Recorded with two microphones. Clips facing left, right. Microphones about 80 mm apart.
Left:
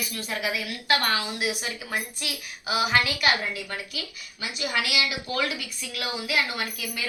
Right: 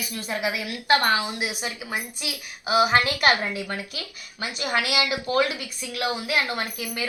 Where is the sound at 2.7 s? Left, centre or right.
Right.